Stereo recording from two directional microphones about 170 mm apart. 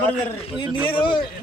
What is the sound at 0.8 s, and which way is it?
Speech, 30° left (ahead or behind).